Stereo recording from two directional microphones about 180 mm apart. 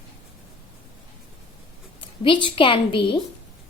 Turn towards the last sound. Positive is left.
turn(degrees=30)  # may be behind; listen again after turning